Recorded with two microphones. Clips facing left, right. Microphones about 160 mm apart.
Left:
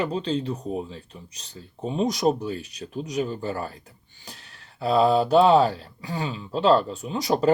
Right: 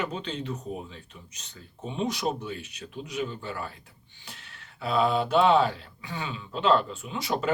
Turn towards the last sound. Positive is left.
turn(degrees=40)  # may be behind; listen again after turning